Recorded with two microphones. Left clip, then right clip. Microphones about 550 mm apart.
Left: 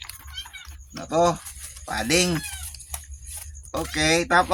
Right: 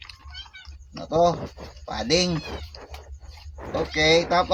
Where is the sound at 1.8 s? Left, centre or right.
Left.